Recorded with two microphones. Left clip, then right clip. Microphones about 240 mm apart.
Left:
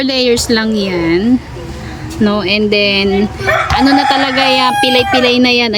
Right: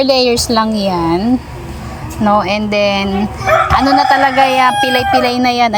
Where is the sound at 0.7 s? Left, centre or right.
Centre.